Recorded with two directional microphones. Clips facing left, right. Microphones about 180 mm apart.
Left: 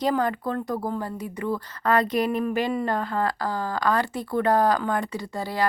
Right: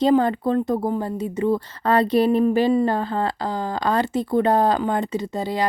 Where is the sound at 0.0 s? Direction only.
25° right (ahead or behind).